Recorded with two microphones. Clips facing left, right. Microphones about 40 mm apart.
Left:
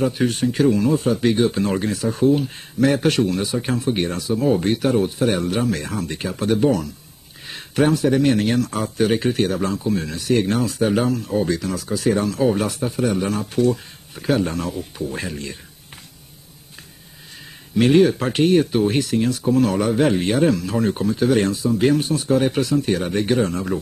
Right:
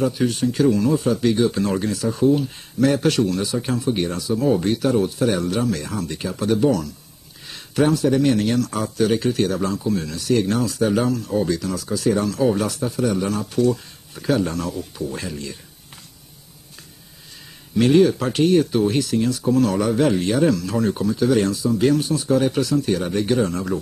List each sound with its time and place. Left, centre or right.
0.0 s speech: left
17.7 s speech: left